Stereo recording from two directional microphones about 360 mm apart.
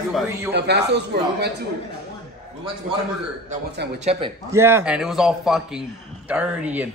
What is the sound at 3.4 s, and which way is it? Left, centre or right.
Speech, right.